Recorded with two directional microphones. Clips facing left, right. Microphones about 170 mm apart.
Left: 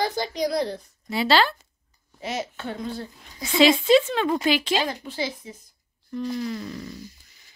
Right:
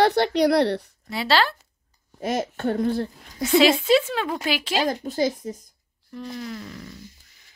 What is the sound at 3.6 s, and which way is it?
A woman's voice, 5° right (ahead or behind).